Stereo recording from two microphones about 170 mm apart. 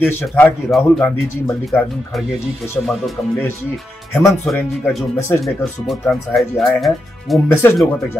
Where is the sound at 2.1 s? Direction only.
Centre (ahead or behind).